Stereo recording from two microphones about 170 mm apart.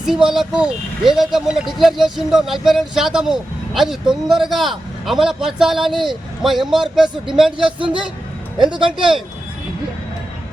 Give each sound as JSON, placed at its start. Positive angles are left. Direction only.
{"t": 0.3, "sound": "speech", "side_deg": -5}